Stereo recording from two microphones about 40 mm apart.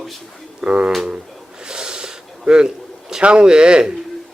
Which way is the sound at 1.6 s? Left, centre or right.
Centre.